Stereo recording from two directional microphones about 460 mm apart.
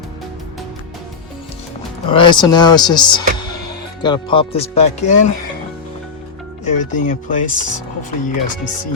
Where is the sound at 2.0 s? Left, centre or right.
Centre.